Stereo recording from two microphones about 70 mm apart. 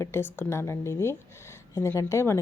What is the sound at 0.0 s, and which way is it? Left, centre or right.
Speech, left.